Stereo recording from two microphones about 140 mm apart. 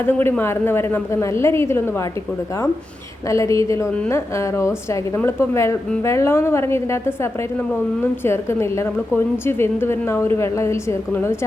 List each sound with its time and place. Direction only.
0.0 s a woman's voice: 15° left (ahead or behind)
3.2 s a woman's voice: 20° left (ahead or behind)